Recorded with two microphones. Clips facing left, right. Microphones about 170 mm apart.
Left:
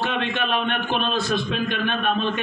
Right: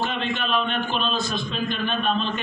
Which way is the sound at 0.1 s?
60° left (ahead or behind).